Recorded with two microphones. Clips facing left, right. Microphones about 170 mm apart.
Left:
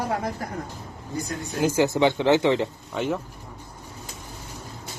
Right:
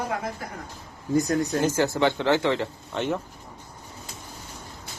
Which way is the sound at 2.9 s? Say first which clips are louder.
Even; 5° left (ahead or behind).